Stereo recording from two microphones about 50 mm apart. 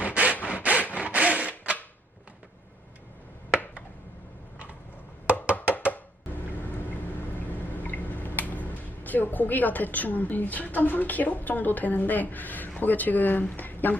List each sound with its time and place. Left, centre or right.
0.0 s sawing: right
0.4 s wood: right
5.2 s wood block: right
7.2 s a sound: left
12.8 s speech: left